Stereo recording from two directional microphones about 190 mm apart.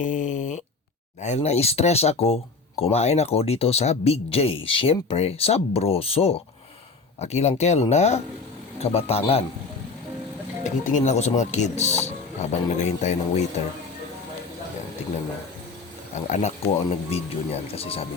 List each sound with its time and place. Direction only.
0.0 s a sound: 40° left (ahead or behind)
1.2 s speech: 35° left (ahead or behind)
10.6 s speech: 40° left (ahead or behind)
16.1 s speech: 40° left (ahead or behind)